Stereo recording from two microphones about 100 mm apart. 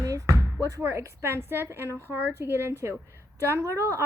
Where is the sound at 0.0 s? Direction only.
30° right (ahead or behind).